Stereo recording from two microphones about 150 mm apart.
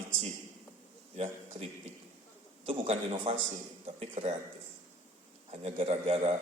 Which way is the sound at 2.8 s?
45° right (ahead or behind).